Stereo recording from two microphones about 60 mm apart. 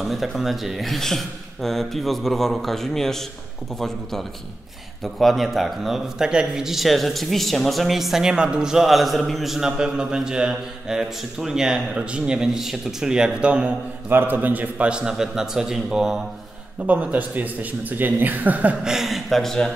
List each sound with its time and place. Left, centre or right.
0.0 s speech: centre
14.0 s speech: right; by 16.2 s centre
16.8 s speech: right
18.9 s speech: centre